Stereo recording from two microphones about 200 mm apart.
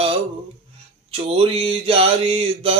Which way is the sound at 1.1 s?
30° right (ahead or behind).